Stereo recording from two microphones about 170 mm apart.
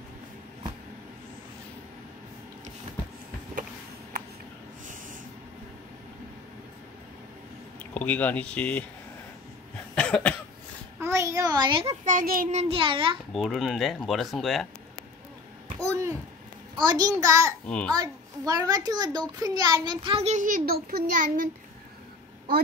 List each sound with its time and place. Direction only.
7.9 s speech: 10° left (ahead or behind)
9.9 s cough: 5° left (ahead or behind)
11.0 s a sound: 15° right (ahead or behind)
12.0 s a child's voice: 55° right (ahead or behind)
12.5 s a child's voice: 35° right (ahead or behind)
13.3 s speech: centre (ahead or behind)
15.8 s a sound: 15° right (ahead or behind)
16.8 s a child's voice: 20° right (ahead or behind)
17.6 s a child's voice: 5° left (ahead or behind)
17.9 s a child's voice: 20° right (ahead or behind); by 21.5 s 55° right (ahead or behind)